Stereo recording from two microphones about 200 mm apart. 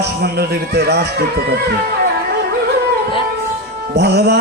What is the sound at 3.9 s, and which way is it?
Speech, 55° right (ahead or behind).